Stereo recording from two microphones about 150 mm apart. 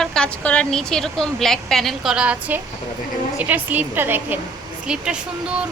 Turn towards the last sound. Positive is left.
turn(degrees=-5)  # may be behind; listen again after turning